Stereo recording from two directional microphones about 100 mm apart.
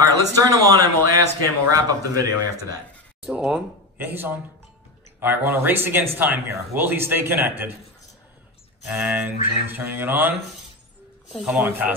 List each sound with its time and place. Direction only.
0.0 s speech: 35° right (ahead or behind)
3.3 s speech: 5° right (ahead or behind)
4.0 s a man's voice: 20° right (ahead or behind)
8.8 s a man's voice: 15° right (ahead or behind)
11.4 s speech: 15° right (ahead or behind)